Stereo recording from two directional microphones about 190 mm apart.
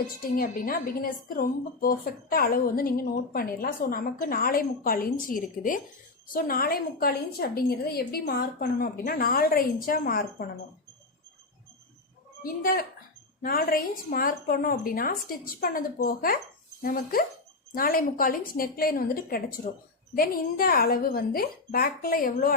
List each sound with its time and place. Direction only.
0.3 s a woman's voice: 50° left (ahead or behind)
12.4 s a woman's voice: 50° left (ahead or behind)